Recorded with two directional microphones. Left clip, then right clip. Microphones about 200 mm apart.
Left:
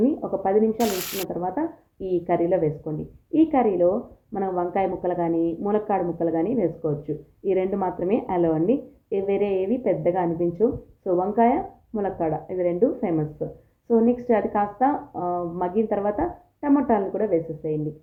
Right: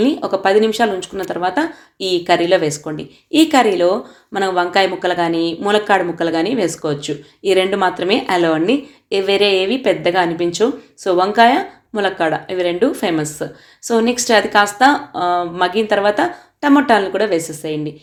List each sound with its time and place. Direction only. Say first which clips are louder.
0.0 s a woman's voice: right 8 dB; 30° right (ahead or behind)